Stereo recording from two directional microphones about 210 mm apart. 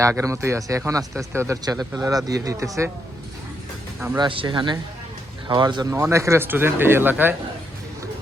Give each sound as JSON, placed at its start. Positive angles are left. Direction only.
{"t": 0.0, "sound": "speech", "side_deg": -15}
{"t": 4.2, "sound": "speech", "side_deg": -25}